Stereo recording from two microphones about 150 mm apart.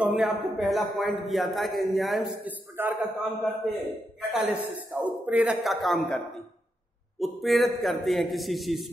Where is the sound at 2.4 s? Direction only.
10° right (ahead or behind).